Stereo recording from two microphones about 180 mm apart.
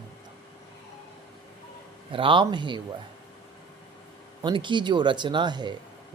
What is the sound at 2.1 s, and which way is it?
Speech, 30° right (ahead or behind).